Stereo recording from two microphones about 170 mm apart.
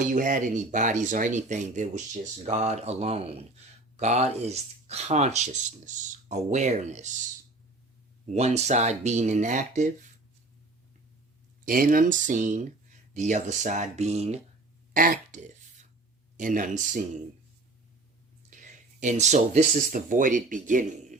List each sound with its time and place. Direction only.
0.1 s speech: 50° right (ahead or behind)
11.6 s speech: 55° right (ahead or behind); by 14.3 s 40° right (ahead or behind)
14.9 s speech: 55° right (ahead or behind)
16.4 s speech: 50° right (ahead or behind)
18.5 s speech: 50° right (ahead or behind)